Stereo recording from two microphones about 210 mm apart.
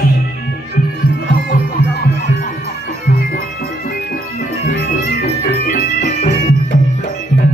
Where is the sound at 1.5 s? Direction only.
45° left (ahead or behind).